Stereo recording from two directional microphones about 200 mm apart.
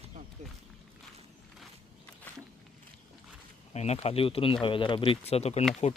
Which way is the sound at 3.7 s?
30° left (ahead or behind).